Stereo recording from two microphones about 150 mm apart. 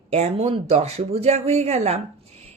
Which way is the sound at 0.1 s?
45° right (ahead or behind).